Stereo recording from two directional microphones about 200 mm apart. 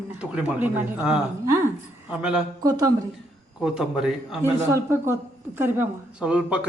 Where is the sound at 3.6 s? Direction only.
Centre (ahead or behind).